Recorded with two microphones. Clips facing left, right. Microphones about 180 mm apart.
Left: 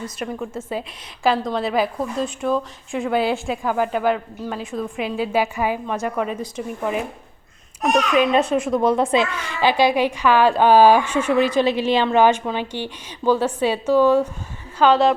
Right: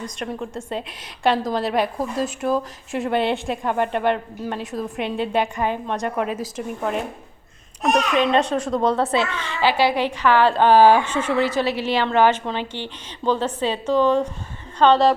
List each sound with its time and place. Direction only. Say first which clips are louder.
0.2 s a woman's voice: left 1 dB; 5° left (ahead or behind)